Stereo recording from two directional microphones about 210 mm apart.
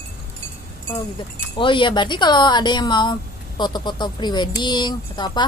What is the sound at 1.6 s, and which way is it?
Speech, 25° left (ahead or behind).